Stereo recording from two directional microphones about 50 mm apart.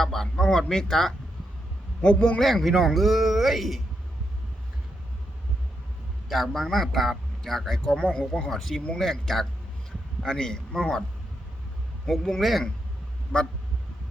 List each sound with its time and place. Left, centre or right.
0.0 s a sound: centre
2.0 s a man's voice: centre
2.4 s a man's voice: centre
6.2 s a man's voice: centre
8.1 s a man's voice: centre
8.4 s a man's voice: centre
12.0 s a man's voice: centre